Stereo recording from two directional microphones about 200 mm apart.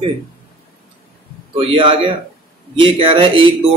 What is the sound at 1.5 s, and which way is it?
A man's voice, 25° right (ahead or behind).